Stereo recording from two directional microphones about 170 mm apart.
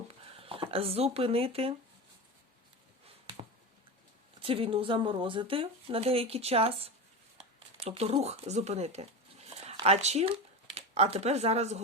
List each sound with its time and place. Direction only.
0.3 s speech: 35° right (ahead or behind)
4.4 s speech: 30° right (ahead or behind)